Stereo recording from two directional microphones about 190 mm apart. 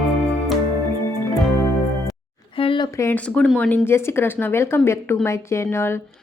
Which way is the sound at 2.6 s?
30° left (ahead or behind).